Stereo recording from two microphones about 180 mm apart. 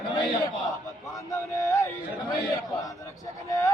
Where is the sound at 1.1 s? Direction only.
15° left (ahead or behind).